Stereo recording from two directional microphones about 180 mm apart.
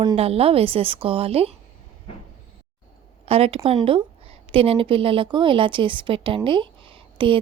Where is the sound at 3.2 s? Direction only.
35° right (ahead or behind).